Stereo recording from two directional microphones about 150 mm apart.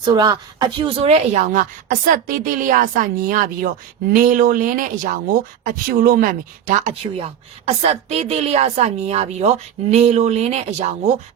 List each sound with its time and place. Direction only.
0.0 s a woman's voice: 30° right (ahead or behind); by 10.9 s 45° right (ahead or behind)